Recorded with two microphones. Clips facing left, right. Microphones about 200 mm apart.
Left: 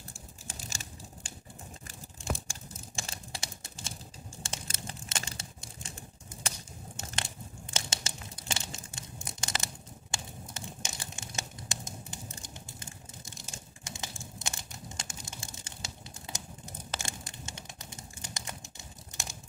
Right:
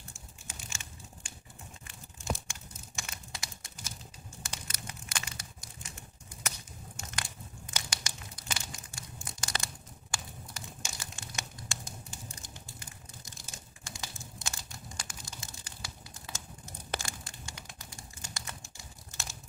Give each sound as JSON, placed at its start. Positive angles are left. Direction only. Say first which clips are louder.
{"t": 0.1, "sound": "a sound", "louder": "left 3 dB", "side_deg": 35}
{"t": 1.9, "sound": "tearing", "louder": "even", "side_deg": 30}
{"t": 3.0, "sound": "typing", "louder": "left 3 dB", "side_deg": 30}
{"t": 4.4, "sound": "crumpling", "louder": "left 3 dB", "side_deg": 25}
{"t": 10.1, "sound": "tearing", "louder": "left 1 dB", "side_deg": 25}